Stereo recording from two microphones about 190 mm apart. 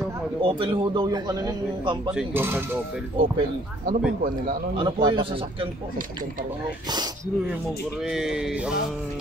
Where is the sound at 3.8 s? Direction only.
45° right (ahead or behind).